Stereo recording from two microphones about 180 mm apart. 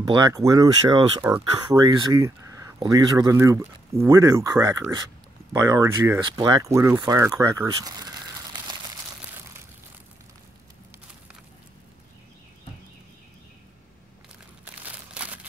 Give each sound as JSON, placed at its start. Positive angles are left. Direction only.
{"t": 0.0, "sound": "speech", "side_deg": -20}